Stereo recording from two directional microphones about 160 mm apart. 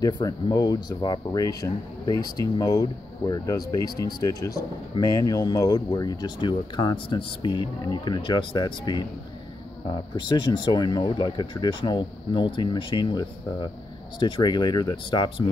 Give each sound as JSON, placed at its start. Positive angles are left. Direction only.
{"t": 0.0, "sound": "speech", "side_deg": 25}